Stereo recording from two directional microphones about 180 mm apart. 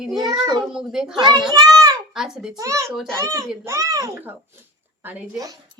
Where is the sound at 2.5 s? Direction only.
15° right (ahead or behind).